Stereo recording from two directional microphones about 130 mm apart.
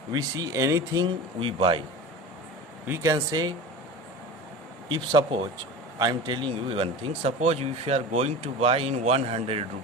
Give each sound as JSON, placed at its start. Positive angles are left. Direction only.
{"t": 0.1, "sound": "speech", "side_deg": -30}
{"t": 1.4, "sound": "speech", "side_deg": -45}
{"t": 2.8, "sound": "speech", "side_deg": -20}
{"t": 4.9, "sound": "speech", "side_deg": -40}